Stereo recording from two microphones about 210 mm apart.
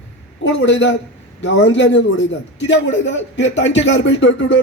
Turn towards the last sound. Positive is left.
turn(degrees=60)  # may be behind; listen again after turning